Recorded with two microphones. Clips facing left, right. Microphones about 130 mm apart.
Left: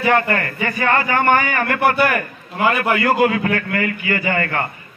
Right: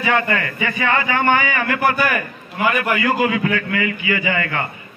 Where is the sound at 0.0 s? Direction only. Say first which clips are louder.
Left 2 dB; 45° left (ahead or behind).